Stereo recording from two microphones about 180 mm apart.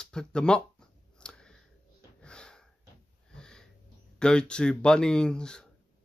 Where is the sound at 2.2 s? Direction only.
5° left (ahead or behind).